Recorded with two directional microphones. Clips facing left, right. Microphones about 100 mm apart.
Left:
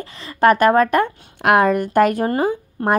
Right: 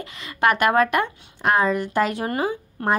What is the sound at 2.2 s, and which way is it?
Speech, 30° left (ahead or behind).